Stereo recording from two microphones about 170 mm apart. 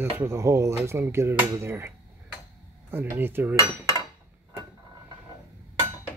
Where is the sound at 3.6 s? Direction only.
20° left (ahead or behind).